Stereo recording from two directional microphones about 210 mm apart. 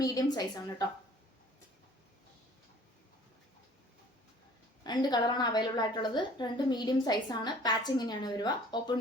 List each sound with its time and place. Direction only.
0.0 s a woman's voice: 20° left (ahead or behind)
4.8 s a woman's voice: 20° left (ahead or behind)